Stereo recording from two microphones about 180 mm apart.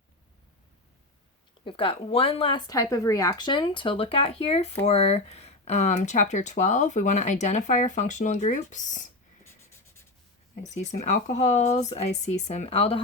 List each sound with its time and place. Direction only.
1.6 s speech: 30° left (ahead or behind)
9.4 s writing: 15° left (ahead or behind)
10.5 s speech: 40° left (ahead or behind)